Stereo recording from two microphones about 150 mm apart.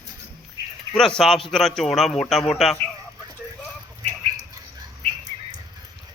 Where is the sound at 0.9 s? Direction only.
5° left (ahead or behind).